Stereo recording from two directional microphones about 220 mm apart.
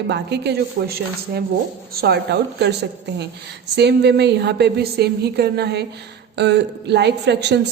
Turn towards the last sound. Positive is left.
turn(degrees=-50)  # may be behind; listen again after turning